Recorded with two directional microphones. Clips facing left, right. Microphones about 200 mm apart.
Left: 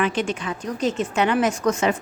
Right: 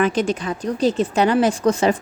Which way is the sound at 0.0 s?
40° right (ahead or behind).